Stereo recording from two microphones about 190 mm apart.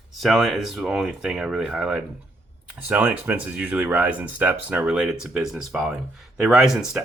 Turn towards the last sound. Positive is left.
turn(degrees=0)  # may be behind; listen again after turning